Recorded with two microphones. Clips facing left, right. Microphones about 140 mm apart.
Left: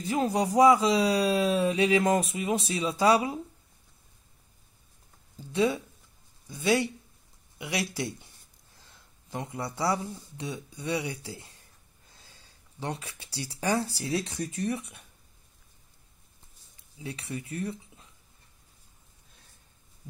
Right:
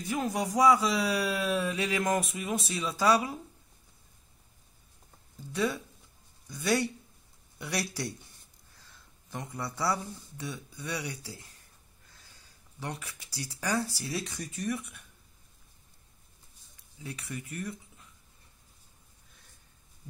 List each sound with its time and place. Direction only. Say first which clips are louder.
0.3 s speech: left 4 dB; 20° left (ahead or behind)
6.5 s speech: left 3 dB; 15° left (ahead or behind)
17.0 s speech: left 3 dB; 25° left (ahead or behind)